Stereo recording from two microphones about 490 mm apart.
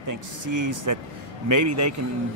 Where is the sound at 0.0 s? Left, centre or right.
Right.